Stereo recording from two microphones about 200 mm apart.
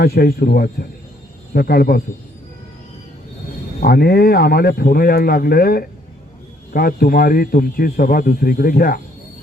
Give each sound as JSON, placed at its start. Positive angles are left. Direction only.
{"t": 0.0, "sound": "speech", "side_deg": 50}
{"t": 3.8, "sound": "speech", "side_deg": 50}